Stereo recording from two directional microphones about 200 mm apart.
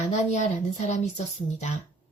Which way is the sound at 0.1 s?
35° left (ahead or behind).